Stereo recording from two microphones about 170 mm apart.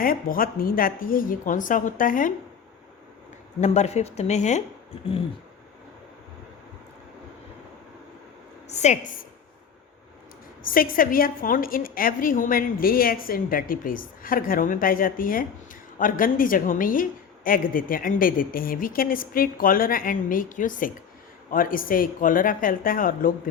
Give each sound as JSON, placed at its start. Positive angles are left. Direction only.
{"t": 0.0, "sound": "a woman's voice", "side_deg": 55}
{"t": 3.6, "sound": "speech", "side_deg": 40}
{"t": 8.6, "sound": "a woman's voice", "side_deg": 40}
{"t": 10.6, "sound": "a woman's voice", "side_deg": 55}